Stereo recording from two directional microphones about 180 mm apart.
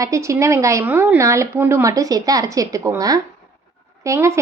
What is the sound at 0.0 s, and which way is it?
A woman's voice, 15° right (ahead or behind).